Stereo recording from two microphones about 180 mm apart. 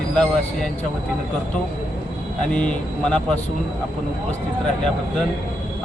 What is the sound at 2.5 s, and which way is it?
Speech, 5° left (ahead or behind).